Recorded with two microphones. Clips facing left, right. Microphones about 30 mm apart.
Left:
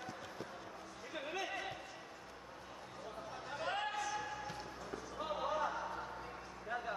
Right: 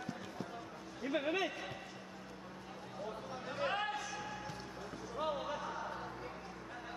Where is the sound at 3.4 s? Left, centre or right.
Centre.